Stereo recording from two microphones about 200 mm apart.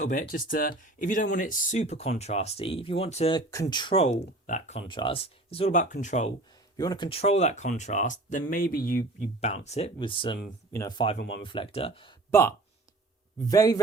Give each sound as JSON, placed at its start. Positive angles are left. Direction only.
{"t": 0.1, "sound": "speech", "side_deg": 40}
{"t": 3.3, "sound": "speech", "side_deg": 20}
{"t": 4.4, "sound": "speech", "side_deg": 40}
{"t": 4.9, "sound": "speech", "side_deg": 25}
{"t": 6.7, "sound": "speech", "side_deg": 20}
{"t": 9.4, "sound": "speech", "side_deg": 35}
{"t": 11.2, "sound": "speech", "side_deg": 60}
{"t": 11.4, "sound": "speech", "side_deg": 25}
{"t": 12.3, "sound": "a man's voice", "side_deg": 15}